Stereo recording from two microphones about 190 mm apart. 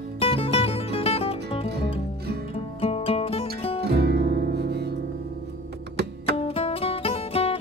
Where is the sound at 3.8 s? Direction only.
55° right (ahead or behind).